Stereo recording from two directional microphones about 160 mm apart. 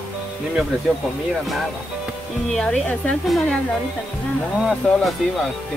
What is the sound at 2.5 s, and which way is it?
A woman's voice, 5° left (ahead or behind).